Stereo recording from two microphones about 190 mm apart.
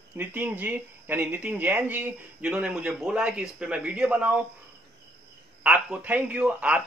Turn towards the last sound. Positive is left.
turn(degrees=-5)  # may be behind; listen again after turning